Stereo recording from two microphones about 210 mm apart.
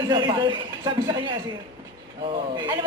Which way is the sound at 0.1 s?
20° right (ahead or behind).